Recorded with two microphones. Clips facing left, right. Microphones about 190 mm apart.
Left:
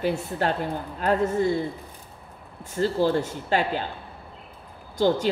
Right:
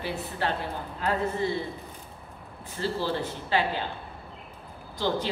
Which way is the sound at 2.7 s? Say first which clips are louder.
Left 7 dB; 45° left (ahead or behind).